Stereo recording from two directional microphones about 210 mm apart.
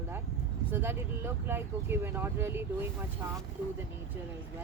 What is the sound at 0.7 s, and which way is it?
Speech, 10° right (ahead or behind).